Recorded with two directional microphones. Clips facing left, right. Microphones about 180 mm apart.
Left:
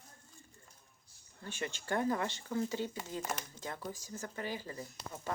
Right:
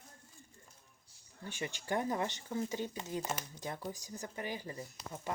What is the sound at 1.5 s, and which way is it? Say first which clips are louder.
Speech: even; 15° right (ahead or behind).